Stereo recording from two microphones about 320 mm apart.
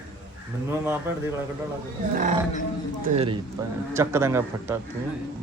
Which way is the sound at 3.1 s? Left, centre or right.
Centre.